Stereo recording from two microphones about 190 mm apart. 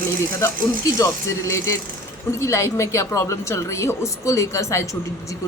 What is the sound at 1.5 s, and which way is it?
A man's voice, 15° left (ahead or behind).